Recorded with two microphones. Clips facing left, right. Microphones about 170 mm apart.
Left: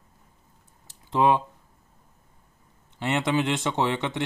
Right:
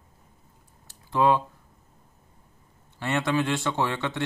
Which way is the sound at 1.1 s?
20° left (ahead or behind).